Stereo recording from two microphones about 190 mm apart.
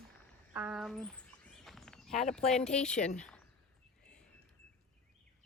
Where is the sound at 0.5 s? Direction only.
5° right (ahead or behind).